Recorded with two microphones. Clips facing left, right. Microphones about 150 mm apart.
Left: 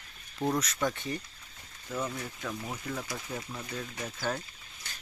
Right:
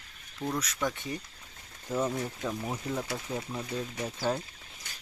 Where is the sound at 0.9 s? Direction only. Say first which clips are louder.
Left 1 dB; 15° right (ahead or behind).